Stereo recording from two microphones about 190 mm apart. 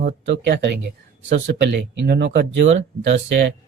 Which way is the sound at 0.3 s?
60° right (ahead or behind).